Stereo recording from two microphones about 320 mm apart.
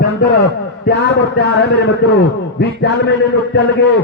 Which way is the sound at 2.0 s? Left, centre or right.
Left.